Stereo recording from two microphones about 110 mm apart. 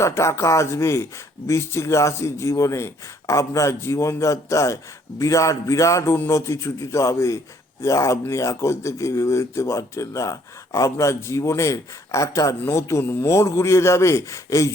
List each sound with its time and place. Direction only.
0.0 s speech: 25° left (ahead or behind)